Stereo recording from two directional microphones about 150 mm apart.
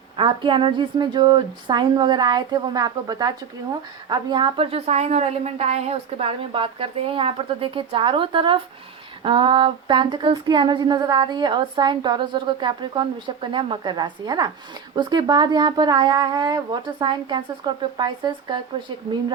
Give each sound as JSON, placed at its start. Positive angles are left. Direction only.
{"t": 0.2, "sound": "speech", "side_deg": -35}
{"t": 4.1, "sound": "a sound", "side_deg": -30}
{"t": 14.9, "sound": "speech", "side_deg": -30}